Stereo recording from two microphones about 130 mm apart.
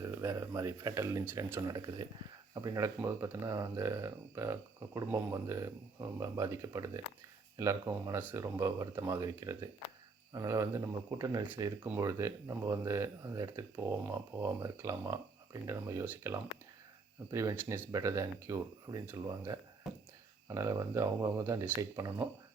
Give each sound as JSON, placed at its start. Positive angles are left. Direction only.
{"t": 0.1, "sound": "speech", "side_deg": -20}
{"t": 17.9, "sound": "speech", "side_deg": -25}
{"t": 19.9, "sound": "a sound", "side_deg": 0}
{"t": 20.5, "sound": "speech", "side_deg": -25}